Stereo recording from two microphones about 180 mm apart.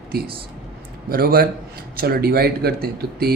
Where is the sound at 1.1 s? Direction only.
55° right (ahead or behind).